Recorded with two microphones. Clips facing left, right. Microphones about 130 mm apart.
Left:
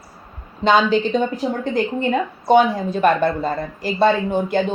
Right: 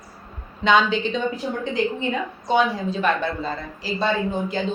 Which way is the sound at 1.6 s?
50° left (ahead or behind).